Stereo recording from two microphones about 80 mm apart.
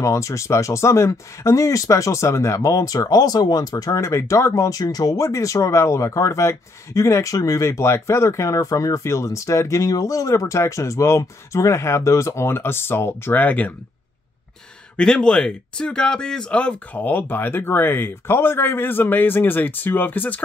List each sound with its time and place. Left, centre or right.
0.0 s speech: left
15.0 s speech: centre